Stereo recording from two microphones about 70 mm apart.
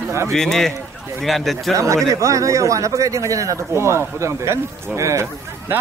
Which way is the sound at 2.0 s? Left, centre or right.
Right.